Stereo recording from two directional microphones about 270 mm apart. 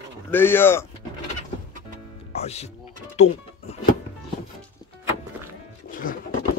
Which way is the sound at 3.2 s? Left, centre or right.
Left.